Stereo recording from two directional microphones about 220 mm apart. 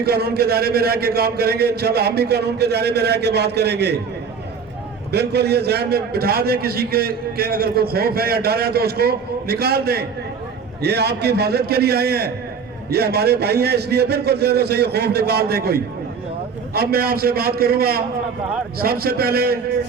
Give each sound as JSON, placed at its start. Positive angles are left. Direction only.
{"t": 0.0, "sound": "a man's voice", "side_deg": -45}
{"t": 5.1, "sound": "a man's voice", "side_deg": -50}